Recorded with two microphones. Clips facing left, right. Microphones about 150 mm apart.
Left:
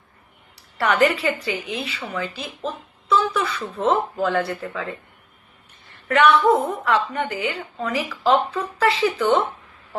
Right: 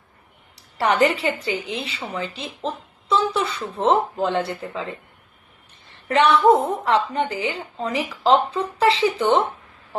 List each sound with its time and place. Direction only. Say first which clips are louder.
0.8 s a woman's voice: even; 25° right (ahead or behind)
6.1 s a woman's voice: right 1 dB; 25° right (ahead or behind)